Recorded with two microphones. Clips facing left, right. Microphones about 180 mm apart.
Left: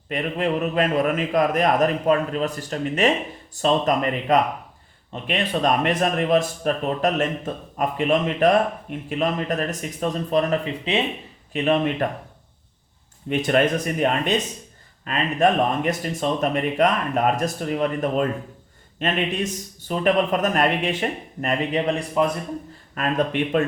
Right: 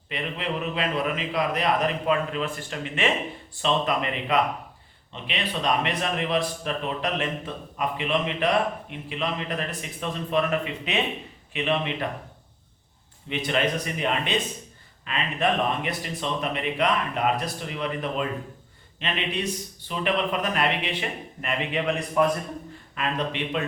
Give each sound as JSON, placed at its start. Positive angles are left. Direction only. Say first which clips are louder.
{"t": 0.1, "sound": "speech", "louder": "left 7 dB", "side_deg": 45}
{"t": 11.5, "sound": "speech", "louder": "left 6 dB", "side_deg": 45}
{"t": 13.2, "sound": "speech", "louder": "left 6 dB", "side_deg": 50}
{"t": 23.0, "sound": "speech", "louder": "left 6 dB", "side_deg": 50}